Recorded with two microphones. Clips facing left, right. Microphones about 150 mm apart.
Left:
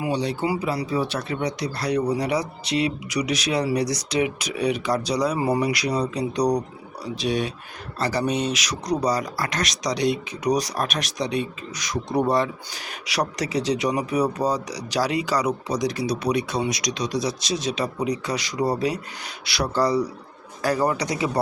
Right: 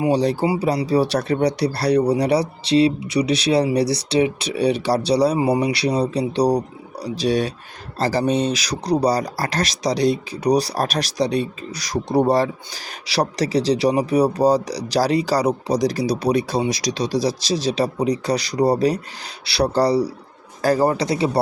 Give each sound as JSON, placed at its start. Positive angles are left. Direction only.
{"t": 0.1, "sound": "speech", "side_deg": -40}
{"t": 5.4, "sound": "speech", "side_deg": -20}
{"t": 5.7, "sound": "speech", "side_deg": -30}